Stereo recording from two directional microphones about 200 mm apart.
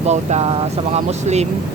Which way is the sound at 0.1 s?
35° right (ahead or behind).